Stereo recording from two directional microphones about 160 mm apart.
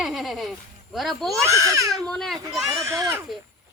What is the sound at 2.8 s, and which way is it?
Speech, 20° right (ahead or behind).